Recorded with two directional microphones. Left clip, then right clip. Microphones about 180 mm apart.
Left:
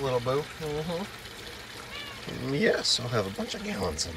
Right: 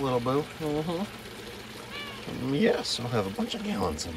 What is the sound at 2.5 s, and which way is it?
Speech, 5° right (ahead or behind).